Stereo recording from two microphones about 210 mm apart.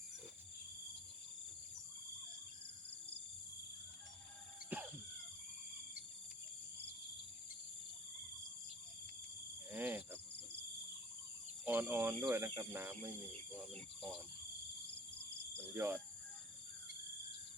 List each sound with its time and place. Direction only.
4.7 s cough: 10° right (ahead or behind)
9.7 s cricket: 10° right (ahead or behind)
11.6 s cricket: 10° right (ahead or behind)
12.2 s speech: 15° right (ahead or behind)
13.7 s speech: 25° right (ahead or behind)
15.7 s speech: 10° right (ahead or behind)